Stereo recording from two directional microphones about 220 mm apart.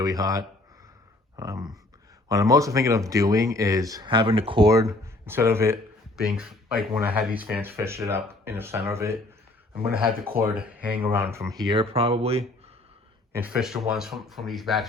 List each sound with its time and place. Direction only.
0.0 s speech: 15° right (ahead or behind)
10.8 s speech: 5° right (ahead or behind); by 12.4 s 25° right (ahead or behind)
13.3 s speech: 5° right (ahead or behind)